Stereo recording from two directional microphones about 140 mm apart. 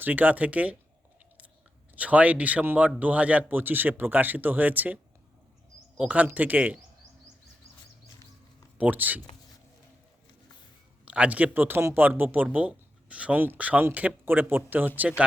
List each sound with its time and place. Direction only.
0.0 s speech: 10° right (ahead or behind)
2.0 s speech: 10° right (ahead or behind)
6.0 s speech: 10° right (ahead or behind)
8.8 s speech: 10° right (ahead or behind)
11.0 s speech: 10° right (ahead or behind)